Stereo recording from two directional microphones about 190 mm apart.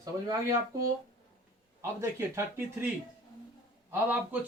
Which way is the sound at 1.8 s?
15° right (ahead or behind).